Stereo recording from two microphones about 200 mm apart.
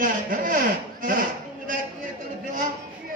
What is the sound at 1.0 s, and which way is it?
Chop, 45° right (ahead or behind).